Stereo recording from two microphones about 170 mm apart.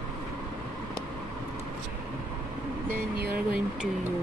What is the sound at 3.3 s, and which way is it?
Speech, 5° right (ahead or behind).